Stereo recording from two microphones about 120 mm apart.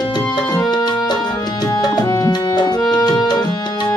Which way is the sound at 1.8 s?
35° left (ahead or behind).